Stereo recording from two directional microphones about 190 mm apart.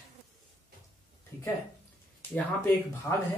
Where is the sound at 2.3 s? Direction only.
10° left (ahead or behind).